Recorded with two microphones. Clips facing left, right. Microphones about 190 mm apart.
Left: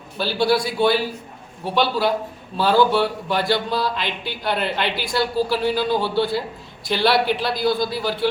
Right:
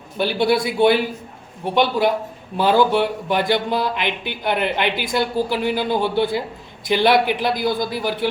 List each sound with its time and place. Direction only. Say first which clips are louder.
0.2 s a man's voice: right 1 dB; 20° right (ahead or behind)